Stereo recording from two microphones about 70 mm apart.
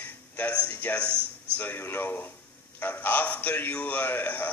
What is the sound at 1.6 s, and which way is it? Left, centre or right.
A man's voice, left.